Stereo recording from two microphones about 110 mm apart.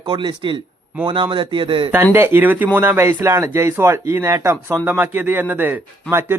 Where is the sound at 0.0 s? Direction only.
40° right (ahead or behind).